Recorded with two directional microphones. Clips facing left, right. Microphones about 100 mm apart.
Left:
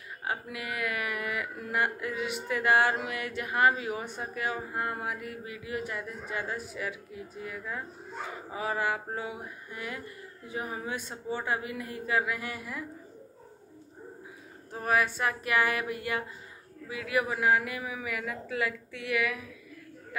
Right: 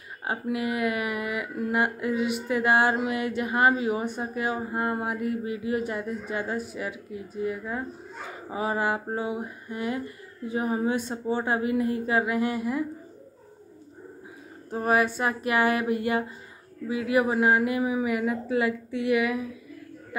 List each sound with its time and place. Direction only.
0.2 s speech: 25° right (ahead or behind)
14.7 s speech: 25° right (ahead or behind)